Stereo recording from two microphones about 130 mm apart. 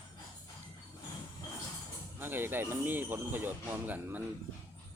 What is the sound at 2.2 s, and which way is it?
Speech, 15° right (ahead or behind).